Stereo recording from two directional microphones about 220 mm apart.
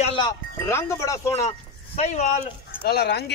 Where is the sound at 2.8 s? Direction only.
45° left (ahead or behind).